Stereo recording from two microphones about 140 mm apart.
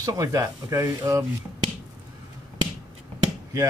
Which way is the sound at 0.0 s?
25° right (ahead or behind).